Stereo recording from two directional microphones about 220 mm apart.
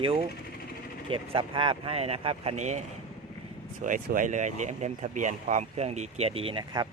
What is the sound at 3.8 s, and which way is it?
Speech, 35° right (ahead or behind).